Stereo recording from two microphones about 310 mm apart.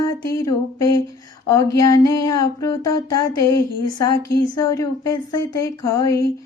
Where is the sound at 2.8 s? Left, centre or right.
Left.